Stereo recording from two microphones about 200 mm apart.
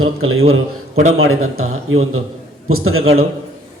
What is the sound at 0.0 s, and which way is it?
A man's voice, 90° right.